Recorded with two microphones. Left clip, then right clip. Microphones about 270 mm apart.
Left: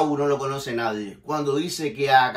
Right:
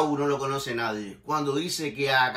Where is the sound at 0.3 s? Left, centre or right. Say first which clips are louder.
Left 3 dB; centre.